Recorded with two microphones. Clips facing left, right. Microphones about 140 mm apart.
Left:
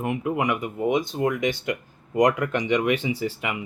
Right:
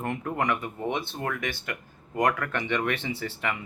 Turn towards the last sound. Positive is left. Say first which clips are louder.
# left 4 dB
turn(degrees=15)  # may be behind; listen again after turning